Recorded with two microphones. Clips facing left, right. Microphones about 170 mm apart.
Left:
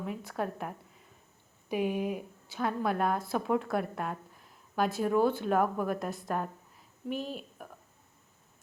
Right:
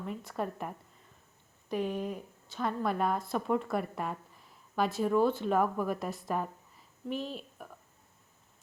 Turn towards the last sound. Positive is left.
turn(degrees=0)  # may be behind; listen again after turning